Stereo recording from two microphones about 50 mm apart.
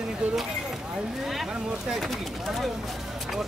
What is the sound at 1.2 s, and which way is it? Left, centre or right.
Speech, centre.